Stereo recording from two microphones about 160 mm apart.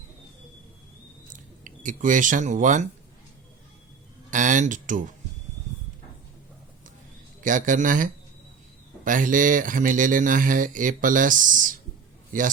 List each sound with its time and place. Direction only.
1.3 s speech: 55° right (ahead or behind)
4.3 s a sound: 50° right (ahead or behind)
7.4 s speech: 55° right (ahead or behind)